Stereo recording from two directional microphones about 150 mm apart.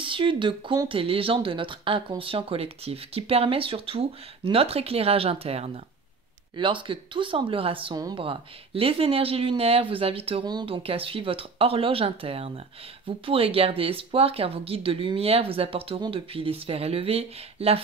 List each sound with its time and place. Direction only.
0.0 s speech: 35° right (ahead or behind)